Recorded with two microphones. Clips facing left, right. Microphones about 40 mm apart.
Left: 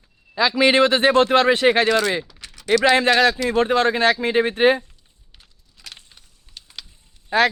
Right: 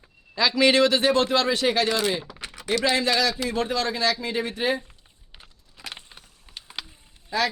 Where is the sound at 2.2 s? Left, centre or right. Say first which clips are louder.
Right 4 dB; right.